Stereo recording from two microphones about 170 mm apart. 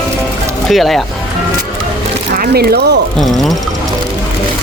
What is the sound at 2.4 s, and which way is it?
Speech, 65° right (ahead or behind).